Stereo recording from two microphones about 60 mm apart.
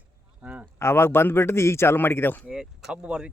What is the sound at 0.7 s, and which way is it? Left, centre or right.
A man's voice, left.